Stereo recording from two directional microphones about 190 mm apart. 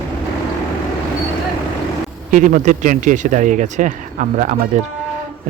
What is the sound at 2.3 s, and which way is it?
Speech, 40° right (ahead or behind).